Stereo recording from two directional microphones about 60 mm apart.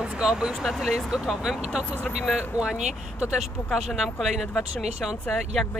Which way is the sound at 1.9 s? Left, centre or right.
Left.